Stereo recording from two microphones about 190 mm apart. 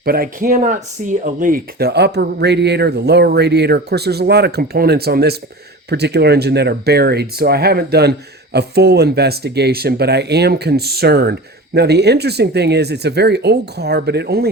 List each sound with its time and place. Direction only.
0.0 s speech: 50° right (ahead or behind)